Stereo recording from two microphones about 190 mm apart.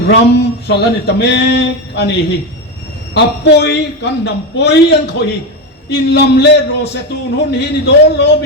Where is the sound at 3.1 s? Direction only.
60° left (ahead or behind).